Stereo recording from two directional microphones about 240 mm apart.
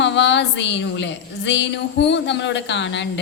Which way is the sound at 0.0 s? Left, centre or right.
Left.